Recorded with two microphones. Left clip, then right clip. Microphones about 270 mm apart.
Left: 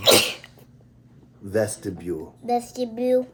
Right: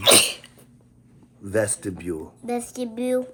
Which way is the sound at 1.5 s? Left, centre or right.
Right.